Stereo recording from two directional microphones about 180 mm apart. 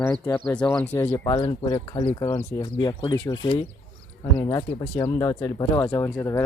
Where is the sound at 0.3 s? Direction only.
20° left (ahead or behind).